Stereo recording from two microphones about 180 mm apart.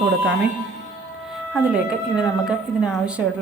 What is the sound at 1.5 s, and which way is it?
Speech, 5° right (ahead or behind).